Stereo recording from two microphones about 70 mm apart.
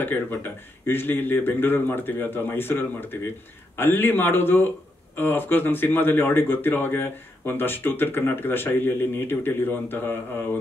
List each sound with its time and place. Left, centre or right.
0.0 s speech: left